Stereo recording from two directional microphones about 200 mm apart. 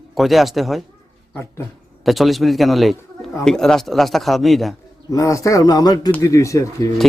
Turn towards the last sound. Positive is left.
turn(degrees=15)  # may be behind; listen again after turning